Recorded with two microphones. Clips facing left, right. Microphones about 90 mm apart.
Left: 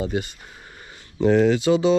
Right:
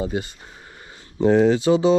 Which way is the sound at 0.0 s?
25° right (ahead or behind).